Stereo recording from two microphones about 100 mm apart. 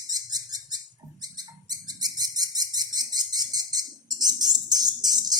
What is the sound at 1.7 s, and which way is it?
Bird, 40° right (ahead or behind).